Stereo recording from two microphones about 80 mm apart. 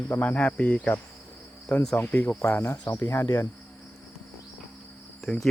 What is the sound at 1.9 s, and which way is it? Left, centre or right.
Speech, left.